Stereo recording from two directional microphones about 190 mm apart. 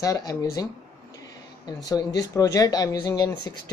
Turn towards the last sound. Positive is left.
turn(degrees=20)  # may be behind; listen again after turning